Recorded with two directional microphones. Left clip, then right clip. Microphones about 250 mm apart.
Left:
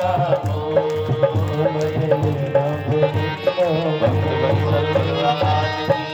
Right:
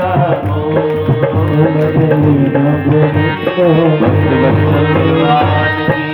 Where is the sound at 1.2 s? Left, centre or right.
Left.